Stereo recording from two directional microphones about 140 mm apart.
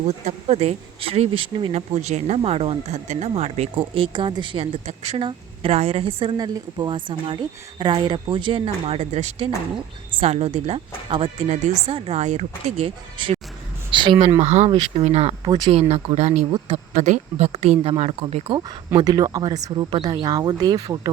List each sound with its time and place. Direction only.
0.3 s speech: 55° right (ahead or behind)
2.0 s speech: 60° right (ahead or behind)
3.8 s a woman's voice: 40° right (ahead or behind)
15.4 s a woman's voice: 30° right (ahead or behind)
15.9 s speech: 55° right (ahead or behind)
16.5 s a woman's voice: 40° right (ahead or behind)
16.9 s speech: 55° right (ahead or behind)
18.9 s speech: 30° right (ahead or behind)